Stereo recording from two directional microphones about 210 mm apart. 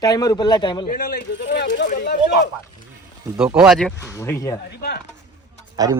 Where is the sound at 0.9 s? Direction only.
45° left (ahead or behind).